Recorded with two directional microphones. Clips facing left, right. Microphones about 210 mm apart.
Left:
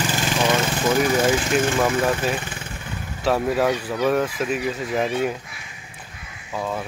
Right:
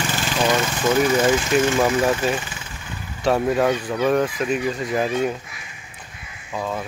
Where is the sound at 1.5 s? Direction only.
Centre (ahead or behind).